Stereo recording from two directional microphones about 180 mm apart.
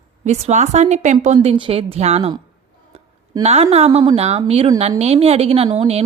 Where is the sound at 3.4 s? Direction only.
35° right (ahead or behind).